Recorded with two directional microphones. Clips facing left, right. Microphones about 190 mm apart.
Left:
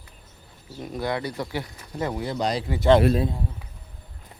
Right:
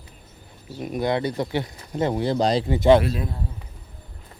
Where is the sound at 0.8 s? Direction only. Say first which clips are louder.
Right 4 dB; 20° right (ahead or behind).